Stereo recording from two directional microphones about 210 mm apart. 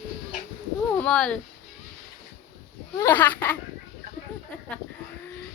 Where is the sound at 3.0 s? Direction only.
10° left (ahead or behind).